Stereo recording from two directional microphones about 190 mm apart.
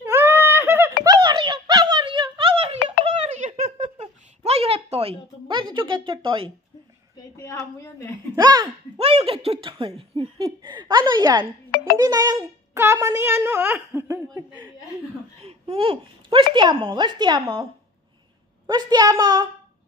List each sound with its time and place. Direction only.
0.0 s a sound: 10° right (ahead or behind)
1.0 s a sound: 20° right (ahead or behind)
4.5 s a woman's voice: 30° right (ahead or behind)
7.3 s a woman's voice: 15° left (ahead or behind)
8.4 s speech: 20° right (ahead or behind)
8.9 s speech: 35° right (ahead or behind)
15.4 s babbling: 30° right (ahead or behind)
16.5 s speech: 25° right (ahead or behind)
18.7 s speech: 25° right (ahead or behind)